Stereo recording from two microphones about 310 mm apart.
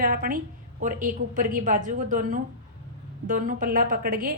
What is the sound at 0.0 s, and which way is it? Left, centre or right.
A woman's voice, right.